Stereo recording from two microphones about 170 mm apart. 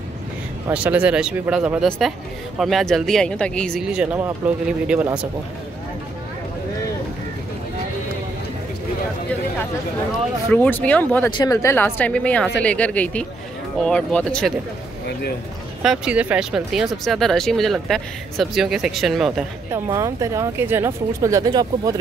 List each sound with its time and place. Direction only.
0.7 s speech: 10° right (ahead or behind)
10.5 s a woman's voice: 10° left (ahead or behind)
11.3 s a woman's voice: 20° left (ahead or behind)
15.8 s speech: 5° right (ahead or behind)
19.7 s speech: 15° right (ahead or behind)